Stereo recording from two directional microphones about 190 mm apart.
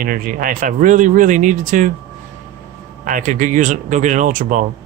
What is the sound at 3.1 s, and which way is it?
Speech, 45° right (ahead or behind).